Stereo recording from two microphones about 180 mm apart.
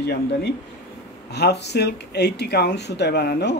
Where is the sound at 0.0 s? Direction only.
65° left (ahead or behind).